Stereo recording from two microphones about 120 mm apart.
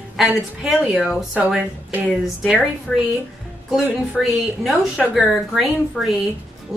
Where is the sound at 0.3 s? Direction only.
5° right (ahead or behind).